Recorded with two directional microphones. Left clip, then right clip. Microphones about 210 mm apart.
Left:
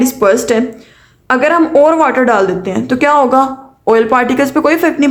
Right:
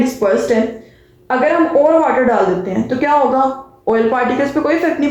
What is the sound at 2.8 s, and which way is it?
A woman's voice, 35° left (ahead or behind).